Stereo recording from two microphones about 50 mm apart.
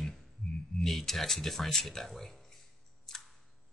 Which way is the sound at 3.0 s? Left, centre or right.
Centre.